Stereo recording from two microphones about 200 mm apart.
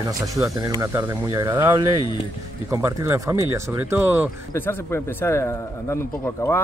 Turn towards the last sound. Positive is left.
turn(degrees=10)  # may be behind; listen again after turning